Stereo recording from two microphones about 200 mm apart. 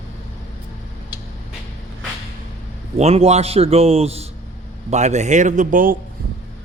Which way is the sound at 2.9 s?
30° right (ahead or behind).